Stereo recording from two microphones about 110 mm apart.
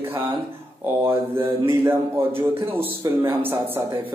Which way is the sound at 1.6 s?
20° right (ahead or behind).